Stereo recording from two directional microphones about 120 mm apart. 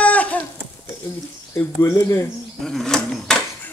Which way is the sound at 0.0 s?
10° left (ahead or behind).